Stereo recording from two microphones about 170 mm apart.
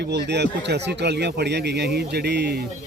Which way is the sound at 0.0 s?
85° right.